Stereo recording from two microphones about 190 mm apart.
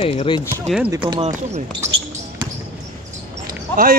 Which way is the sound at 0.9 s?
20° right (ahead or behind).